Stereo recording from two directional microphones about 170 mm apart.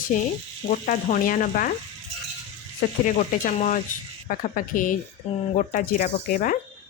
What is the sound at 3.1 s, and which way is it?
A woman's voice, 50° left (ahead or behind).